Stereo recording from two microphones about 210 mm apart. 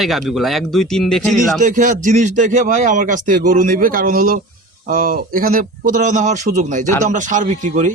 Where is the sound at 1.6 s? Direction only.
35° right (ahead or behind).